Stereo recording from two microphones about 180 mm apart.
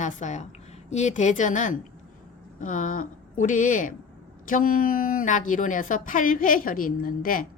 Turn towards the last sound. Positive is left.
turn(degrees=50)  # may be behind; listen again after turning